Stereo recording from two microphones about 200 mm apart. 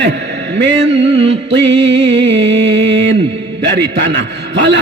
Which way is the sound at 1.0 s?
30° right (ahead or behind).